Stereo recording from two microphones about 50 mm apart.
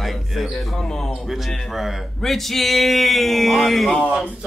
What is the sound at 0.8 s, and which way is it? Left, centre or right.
Speech, centre.